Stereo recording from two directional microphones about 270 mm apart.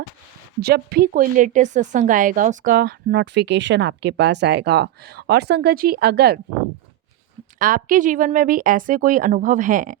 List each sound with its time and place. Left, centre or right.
0.6 s a woman's voice: right
7.6 s a woman's voice: right